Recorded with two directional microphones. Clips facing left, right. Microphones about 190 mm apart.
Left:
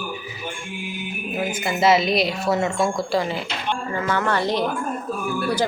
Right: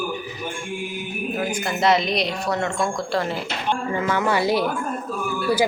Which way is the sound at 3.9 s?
10° right (ahead or behind).